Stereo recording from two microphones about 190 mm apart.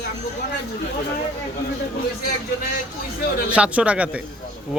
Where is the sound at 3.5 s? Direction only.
5° right (ahead or behind).